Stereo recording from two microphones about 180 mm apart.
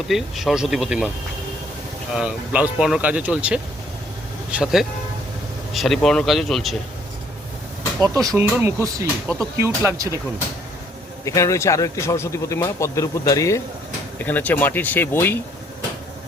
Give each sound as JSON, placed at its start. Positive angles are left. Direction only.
{"t": 0.1, "sound": "speech", "side_deg": 0}
{"t": 2.1, "sound": "speech", "side_deg": -5}
{"t": 8.0, "sound": "speech", "side_deg": -20}
{"t": 11.3, "sound": "a man's voice", "side_deg": 15}